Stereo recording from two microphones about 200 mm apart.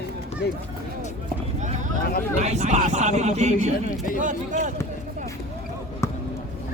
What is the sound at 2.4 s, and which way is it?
Speech, 35° right (ahead or behind).